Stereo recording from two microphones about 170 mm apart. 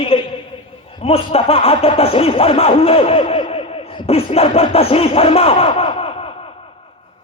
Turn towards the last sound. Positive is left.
turn(degrees=35)  # may be behind; listen again after turning